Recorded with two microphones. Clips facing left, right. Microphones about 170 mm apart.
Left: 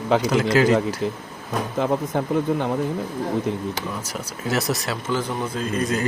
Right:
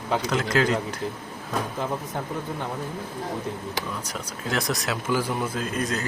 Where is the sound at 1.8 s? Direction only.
80° left.